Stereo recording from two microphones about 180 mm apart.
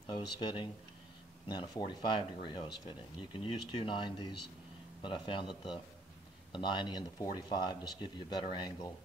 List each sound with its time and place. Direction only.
0.0 s speech: 25° left (ahead or behind)